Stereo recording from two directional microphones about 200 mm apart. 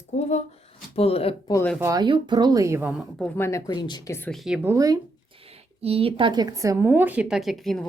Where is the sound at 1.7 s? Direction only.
15° right (ahead or behind).